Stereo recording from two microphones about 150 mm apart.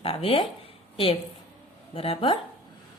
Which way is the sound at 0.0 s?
40° left (ahead or behind).